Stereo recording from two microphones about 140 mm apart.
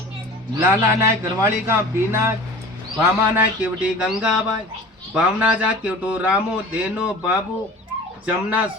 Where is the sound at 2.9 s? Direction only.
10° right (ahead or behind).